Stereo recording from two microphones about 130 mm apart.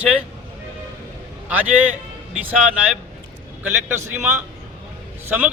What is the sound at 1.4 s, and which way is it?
Speech, 10° right (ahead or behind).